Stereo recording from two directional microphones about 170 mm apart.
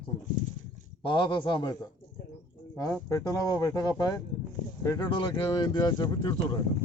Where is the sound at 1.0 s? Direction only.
25° left (ahead or behind).